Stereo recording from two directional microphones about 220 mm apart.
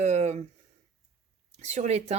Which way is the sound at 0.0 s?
30° right (ahead or behind).